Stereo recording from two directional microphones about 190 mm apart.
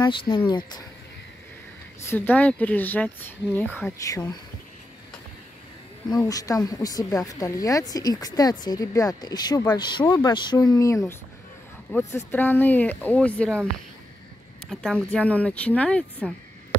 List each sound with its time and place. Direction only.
0.0 s speech: 25° left (ahead or behind)
2.0 s speech: 10° left (ahead or behind)
6.0 s speech: 20° left (ahead or behind)
14.7 s speech: 5° left (ahead or behind)